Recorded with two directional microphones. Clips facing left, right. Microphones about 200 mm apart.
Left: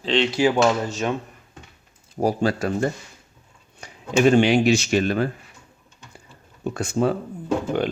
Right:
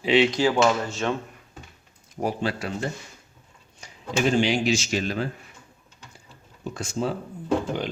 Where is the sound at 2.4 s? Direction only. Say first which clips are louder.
Left 6 dB; 45° left (ahead or behind).